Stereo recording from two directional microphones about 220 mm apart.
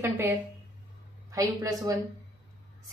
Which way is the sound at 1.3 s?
15° right (ahead or behind).